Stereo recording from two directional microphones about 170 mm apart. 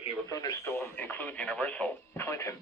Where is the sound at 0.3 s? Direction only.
20° left (ahead or behind).